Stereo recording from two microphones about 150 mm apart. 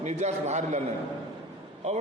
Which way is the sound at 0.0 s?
50° right (ahead or behind).